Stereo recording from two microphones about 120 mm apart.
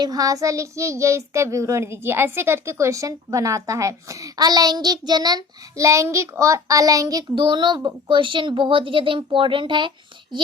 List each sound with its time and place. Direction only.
0.0 s a child's voice: 30° right (ahead or behind)